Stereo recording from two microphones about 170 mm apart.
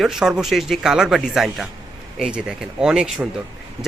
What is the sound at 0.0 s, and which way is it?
Speech, centre (ahead or behind).